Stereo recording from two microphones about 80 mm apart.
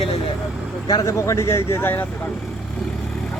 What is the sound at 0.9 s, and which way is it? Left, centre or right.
Speech, left.